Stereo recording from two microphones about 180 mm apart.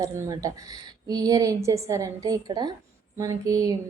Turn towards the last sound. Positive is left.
turn(degrees=-20)  # may be behind; listen again after turning